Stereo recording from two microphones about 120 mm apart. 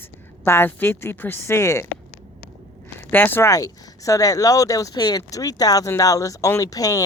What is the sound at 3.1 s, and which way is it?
Speech, 15° left (ahead or behind).